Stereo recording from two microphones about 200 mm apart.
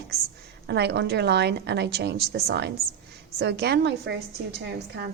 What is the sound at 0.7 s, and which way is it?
A woman's voice, 55° right (ahead or behind).